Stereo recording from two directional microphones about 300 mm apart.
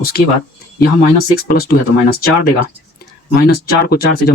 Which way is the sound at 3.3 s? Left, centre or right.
Left.